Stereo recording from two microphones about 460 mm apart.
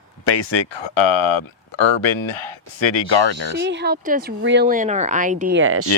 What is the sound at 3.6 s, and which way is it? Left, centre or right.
Speech, right.